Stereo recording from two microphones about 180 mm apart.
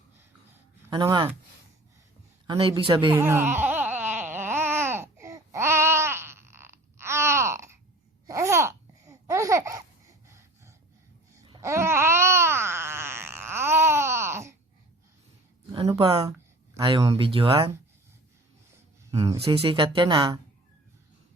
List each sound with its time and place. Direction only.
0.9 s speech: 20° right (ahead or behind)
2.5 s speech: 25° right (ahead or behind)
3.2 s baby cry: 10° right (ahead or behind)
8.3 s babbling: 15° right (ahead or behind)
10.3 s breathing: 15° right (ahead or behind)
11.6 s a sound: 15° right (ahead or behind)
15.7 s a sound: 30° right (ahead or behind)
19.5 s speech: 30° right (ahead or behind)